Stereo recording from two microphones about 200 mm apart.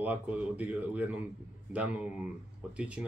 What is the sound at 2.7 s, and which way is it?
Speech, 5° right (ahead or behind).